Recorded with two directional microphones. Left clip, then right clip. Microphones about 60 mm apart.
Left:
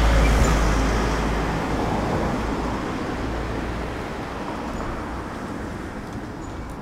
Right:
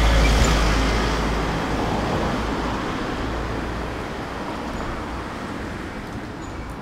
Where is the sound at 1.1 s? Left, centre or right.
Right.